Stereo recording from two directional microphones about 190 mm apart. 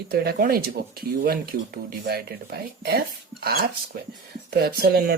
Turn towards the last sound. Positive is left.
turn(degrees=-55)  # may be behind; listen again after turning